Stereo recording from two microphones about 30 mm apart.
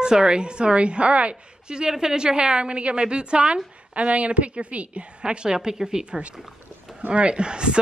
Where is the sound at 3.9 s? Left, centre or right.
Right.